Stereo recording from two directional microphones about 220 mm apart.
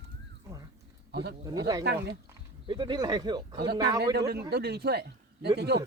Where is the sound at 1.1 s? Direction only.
50° right (ahead or behind).